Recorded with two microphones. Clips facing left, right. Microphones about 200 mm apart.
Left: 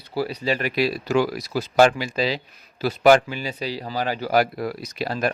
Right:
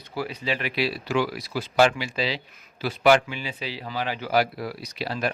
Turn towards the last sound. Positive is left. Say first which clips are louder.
# left 3 dB
turn(degrees=45)  # may be behind; listen again after turning